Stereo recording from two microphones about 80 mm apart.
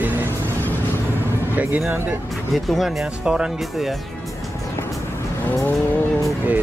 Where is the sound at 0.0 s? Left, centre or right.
Right.